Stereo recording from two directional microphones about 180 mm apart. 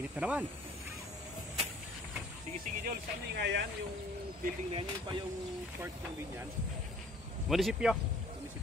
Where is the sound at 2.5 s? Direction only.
60° right (ahead or behind).